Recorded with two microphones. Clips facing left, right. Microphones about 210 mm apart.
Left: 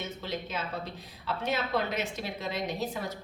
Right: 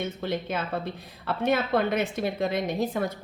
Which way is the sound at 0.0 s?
55° right (ahead or behind).